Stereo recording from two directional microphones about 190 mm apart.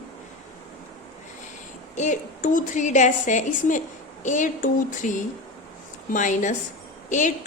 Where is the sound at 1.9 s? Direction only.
40° left (ahead or behind).